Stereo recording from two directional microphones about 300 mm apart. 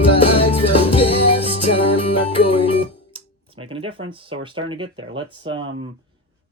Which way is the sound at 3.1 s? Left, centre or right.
Centre.